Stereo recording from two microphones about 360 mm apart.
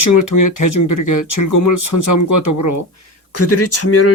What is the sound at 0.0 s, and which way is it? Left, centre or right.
Speech, left.